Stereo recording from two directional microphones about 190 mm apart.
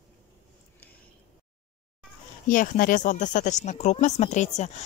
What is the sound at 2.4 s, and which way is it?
Speech, 45° left (ahead or behind).